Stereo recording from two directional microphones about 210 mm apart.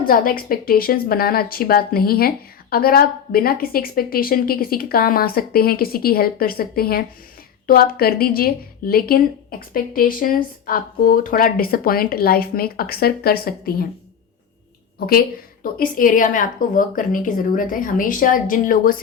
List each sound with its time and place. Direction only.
0.1 s speech: 40° left (ahead or behind)
14.9 s speech: 45° left (ahead or behind)